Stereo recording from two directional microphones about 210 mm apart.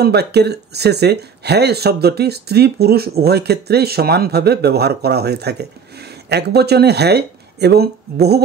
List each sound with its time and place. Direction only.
0.0 s speech: 50° right (ahead or behind)